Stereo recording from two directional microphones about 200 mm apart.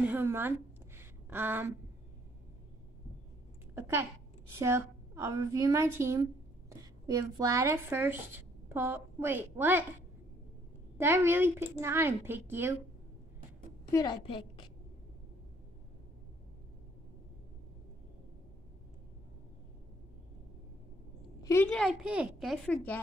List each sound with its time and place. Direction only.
0.0 s a sound: 10° right (ahead or behind)
3.7 s speech: 10° right (ahead or behind)
11.0 s speech: 10° right (ahead or behind)
13.9 s a woman's voice: 25° left (ahead or behind)
21.4 s a woman's voice: 15° left (ahead or behind)